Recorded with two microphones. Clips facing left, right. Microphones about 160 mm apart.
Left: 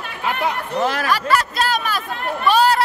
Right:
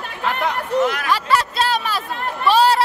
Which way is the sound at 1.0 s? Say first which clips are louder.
Even; 25° right (ahead or behind).